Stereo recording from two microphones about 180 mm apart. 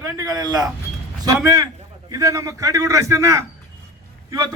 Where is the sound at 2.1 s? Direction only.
20° right (ahead or behind).